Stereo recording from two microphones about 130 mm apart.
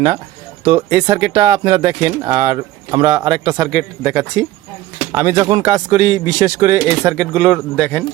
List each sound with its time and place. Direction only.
0.6 s speech: 35° right (ahead or behind)
7.3 s a man's voice: centre (ahead or behind)